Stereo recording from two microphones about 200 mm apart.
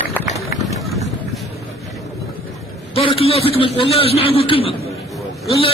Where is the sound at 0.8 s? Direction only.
Centre (ahead or behind).